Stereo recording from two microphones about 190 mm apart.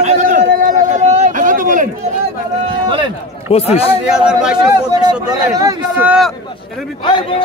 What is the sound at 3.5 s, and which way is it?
Speech, 35° left (ahead or behind).